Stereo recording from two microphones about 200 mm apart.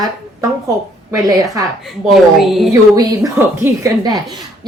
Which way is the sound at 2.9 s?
15° right (ahead or behind).